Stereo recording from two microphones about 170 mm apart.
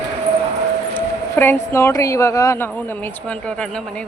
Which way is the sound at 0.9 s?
10° left (ahead or behind).